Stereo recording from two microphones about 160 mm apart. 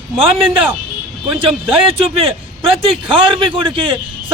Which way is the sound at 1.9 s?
35° right (ahead or behind).